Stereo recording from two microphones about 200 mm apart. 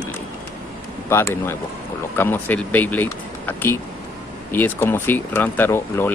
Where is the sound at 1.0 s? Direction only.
10° left (ahead or behind).